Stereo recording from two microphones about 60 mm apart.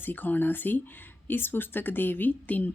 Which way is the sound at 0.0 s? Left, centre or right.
Left.